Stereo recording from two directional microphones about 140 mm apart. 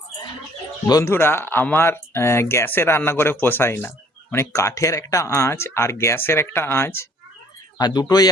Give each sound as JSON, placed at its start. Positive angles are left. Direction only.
{"t": 0.9, "sound": "speech", "side_deg": 25}
{"t": 7.8, "sound": "speech", "side_deg": 30}